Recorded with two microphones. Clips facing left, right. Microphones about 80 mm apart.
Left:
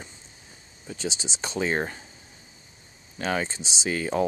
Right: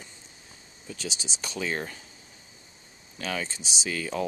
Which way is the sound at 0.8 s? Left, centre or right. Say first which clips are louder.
Left 4 dB; left.